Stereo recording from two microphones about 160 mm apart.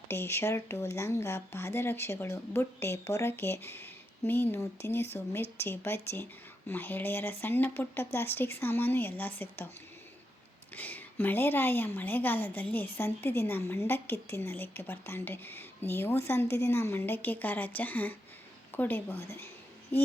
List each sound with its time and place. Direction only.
0.1 s a woman's voice: 15° left (ahead or behind)
10.8 s a woman's voice: 10° left (ahead or behind)